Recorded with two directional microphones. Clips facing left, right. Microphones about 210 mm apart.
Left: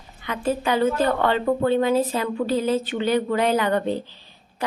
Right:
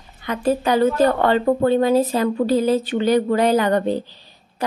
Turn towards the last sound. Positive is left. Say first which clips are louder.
# right 4 dB
turn(degrees=-40)  # may be behind; listen again after turning